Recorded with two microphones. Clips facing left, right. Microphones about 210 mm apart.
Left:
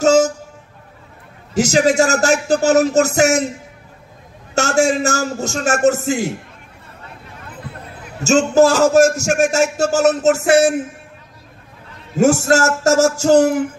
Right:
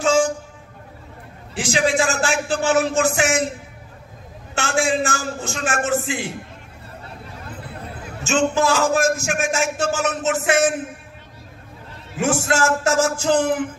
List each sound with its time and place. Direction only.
0.0 s train: 40° left (ahead or behind)
1.5 s a man's voice: 40° left (ahead or behind)
4.6 s a man's voice: 40° left (ahead or behind)
8.2 s a man's voice: 40° left (ahead or behind)
12.2 s speech: 45° left (ahead or behind)